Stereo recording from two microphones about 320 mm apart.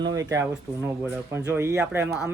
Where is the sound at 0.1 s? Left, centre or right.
Centre.